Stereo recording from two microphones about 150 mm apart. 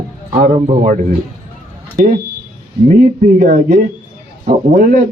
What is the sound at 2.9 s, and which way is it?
Speech, 60° right (ahead or behind).